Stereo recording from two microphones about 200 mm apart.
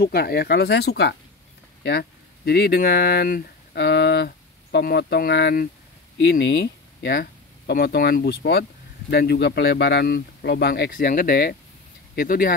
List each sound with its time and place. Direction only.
0.0 s speech: 50° left (ahead or behind)